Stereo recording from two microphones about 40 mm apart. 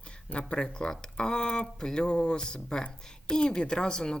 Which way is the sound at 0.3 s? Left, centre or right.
Left.